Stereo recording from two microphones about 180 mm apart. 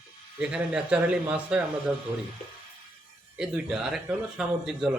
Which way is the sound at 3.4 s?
5° right (ahead or behind).